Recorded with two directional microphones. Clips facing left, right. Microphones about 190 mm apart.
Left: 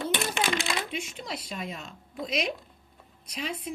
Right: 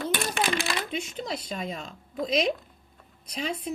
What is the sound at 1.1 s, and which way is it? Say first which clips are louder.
Speech: right 4 dB; 25° right (ahead or behind).